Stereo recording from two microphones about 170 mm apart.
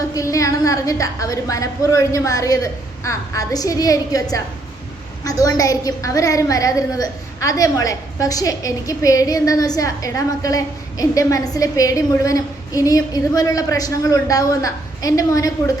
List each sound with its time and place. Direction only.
0.1 s a woman's voice: 20° left (ahead or behind)